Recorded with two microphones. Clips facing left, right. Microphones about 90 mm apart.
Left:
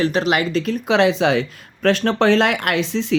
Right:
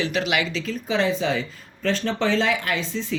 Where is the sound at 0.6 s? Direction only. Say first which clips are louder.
Left 7 dB; 70° left (ahead or behind).